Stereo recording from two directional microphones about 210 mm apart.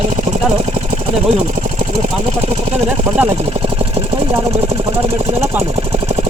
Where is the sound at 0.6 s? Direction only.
35° right (ahead or behind).